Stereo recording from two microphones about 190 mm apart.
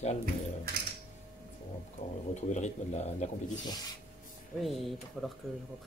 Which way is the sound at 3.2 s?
35° left (ahead or behind).